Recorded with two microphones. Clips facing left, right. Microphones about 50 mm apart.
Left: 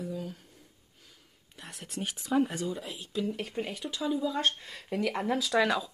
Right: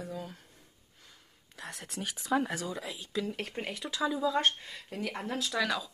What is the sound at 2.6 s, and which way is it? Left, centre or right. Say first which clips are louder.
Speech: left 3 dB; right.